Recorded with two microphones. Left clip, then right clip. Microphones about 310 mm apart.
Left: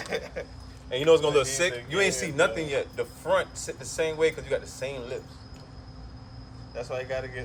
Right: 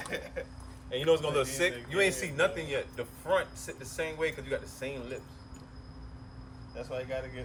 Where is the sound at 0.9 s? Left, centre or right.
Centre.